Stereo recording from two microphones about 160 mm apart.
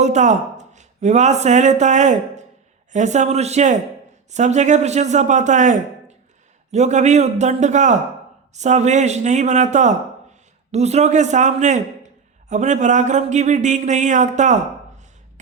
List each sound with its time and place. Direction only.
0.0 s speech: 45° right (ahead or behind)